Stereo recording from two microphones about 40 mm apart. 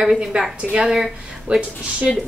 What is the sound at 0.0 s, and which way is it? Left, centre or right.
Speech, centre.